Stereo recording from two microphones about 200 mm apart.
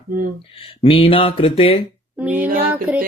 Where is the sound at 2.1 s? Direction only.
10° right (ahead or behind).